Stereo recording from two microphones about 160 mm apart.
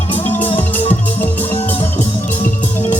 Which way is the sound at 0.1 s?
10° left (ahead or behind).